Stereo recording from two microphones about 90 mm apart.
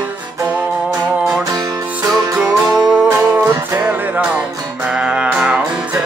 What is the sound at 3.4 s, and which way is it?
Music, 30° right (ahead or behind).